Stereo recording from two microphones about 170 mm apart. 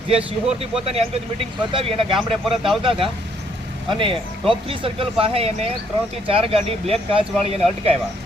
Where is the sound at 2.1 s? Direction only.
Centre (ahead or behind).